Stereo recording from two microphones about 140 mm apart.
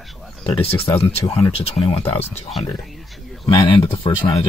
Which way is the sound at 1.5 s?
45° left (ahead or behind).